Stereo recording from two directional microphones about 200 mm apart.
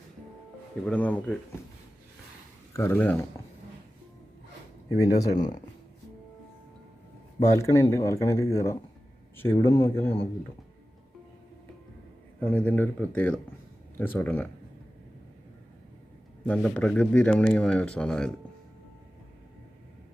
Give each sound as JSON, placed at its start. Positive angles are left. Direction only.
{"t": 0.9, "sound": "speech", "side_deg": 5}
{"t": 2.7, "sound": "speech", "side_deg": 10}
{"t": 4.9, "sound": "speech", "side_deg": 15}
{"t": 7.3, "sound": "speech", "side_deg": 15}
{"t": 12.4, "sound": "speech", "side_deg": 10}
{"t": 16.5, "sound": "a man's voice", "side_deg": 5}